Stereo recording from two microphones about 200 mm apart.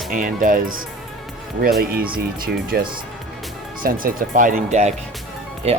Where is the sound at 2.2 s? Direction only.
50° right (ahead or behind); by 5.8 s 30° right (ahead or behind).